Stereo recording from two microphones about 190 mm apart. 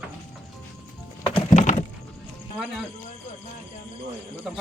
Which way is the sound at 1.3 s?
25° left (ahead or behind).